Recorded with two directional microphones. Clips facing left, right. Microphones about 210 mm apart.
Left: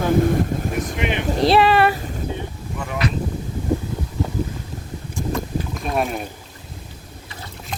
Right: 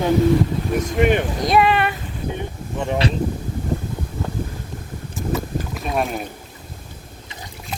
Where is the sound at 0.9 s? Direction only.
45° right (ahead or behind).